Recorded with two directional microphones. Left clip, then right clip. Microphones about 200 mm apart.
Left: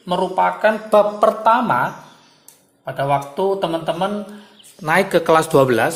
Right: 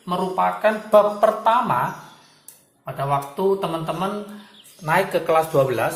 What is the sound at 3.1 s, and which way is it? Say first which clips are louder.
Speech: left 2 dB; 45° left (ahead or behind).